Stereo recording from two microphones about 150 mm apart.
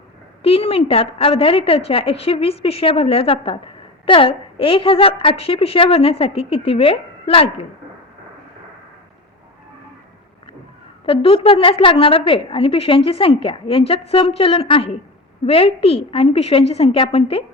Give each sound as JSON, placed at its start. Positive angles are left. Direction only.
{"t": 0.4, "sound": "a woman's voice", "side_deg": 40}
{"t": 11.0, "sound": "a woman's voice", "side_deg": 35}